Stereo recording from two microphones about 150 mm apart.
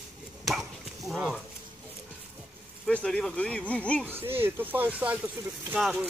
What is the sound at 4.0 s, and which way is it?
Speech, 15° right (ahead or behind).